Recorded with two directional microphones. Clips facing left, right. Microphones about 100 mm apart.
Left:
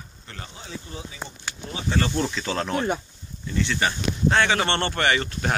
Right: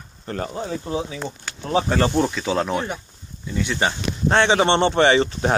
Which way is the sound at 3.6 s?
20° right (ahead or behind).